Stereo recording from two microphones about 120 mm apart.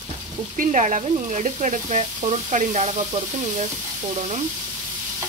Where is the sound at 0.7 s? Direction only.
90° right; by 3.0 s 75° right (ahead or behind).